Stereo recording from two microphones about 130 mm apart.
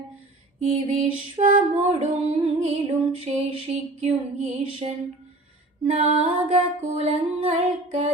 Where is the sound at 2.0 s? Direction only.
55° right (ahead or behind).